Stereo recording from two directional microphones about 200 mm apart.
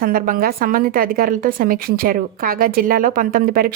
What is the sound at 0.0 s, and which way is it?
A woman's voice, 45° right (ahead or behind).